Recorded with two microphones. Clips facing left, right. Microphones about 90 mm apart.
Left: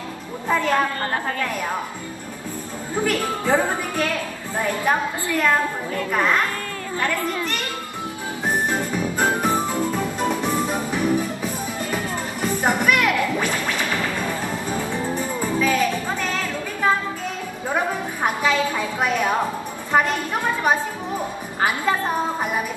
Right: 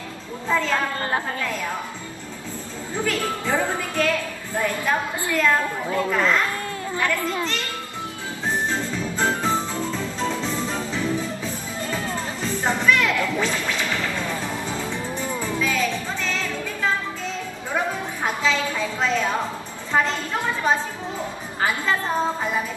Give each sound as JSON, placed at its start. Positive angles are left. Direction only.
{"t": 0.5, "sound": "a woman's voice", "side_deg": 15}
{"t": 2.9, "sound": "a woman's voice", "side_deg": 15}
{"t": 7.2, "sound": "a child's voice", "side_deg": -20}
{"t": 8.5, "sound": "music", "side_deg": 15}
{"t": 18.2, "sound": "a sound", "side_deg": 15}
{"t": 19.9, "sound": "a woman's voice", "side_deg": 15}